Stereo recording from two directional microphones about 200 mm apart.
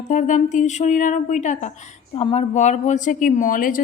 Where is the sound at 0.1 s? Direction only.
40° left (ahead or behind).